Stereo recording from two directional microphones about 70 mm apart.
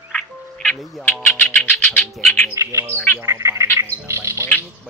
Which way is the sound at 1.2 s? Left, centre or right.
Left.